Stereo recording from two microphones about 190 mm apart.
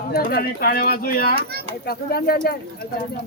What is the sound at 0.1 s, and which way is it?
Speech, 55° left (ahead or behind).